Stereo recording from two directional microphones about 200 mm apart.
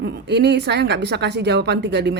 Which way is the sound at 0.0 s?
55° right (ahead or behind).